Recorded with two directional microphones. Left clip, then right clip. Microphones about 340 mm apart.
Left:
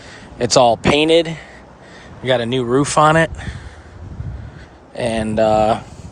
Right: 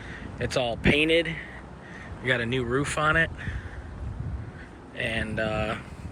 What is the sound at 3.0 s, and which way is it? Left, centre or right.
Speech, left.